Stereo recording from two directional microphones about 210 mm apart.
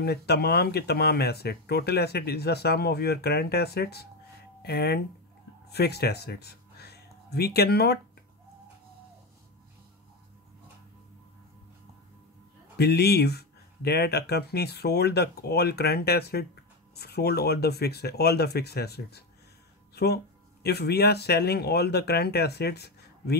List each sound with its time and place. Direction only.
0.0 s speech: 50° left (ahead or behind)
12.7 s speech: 50° left (ahead or behind)
20.6 s speech: 50° left (ahead or behind)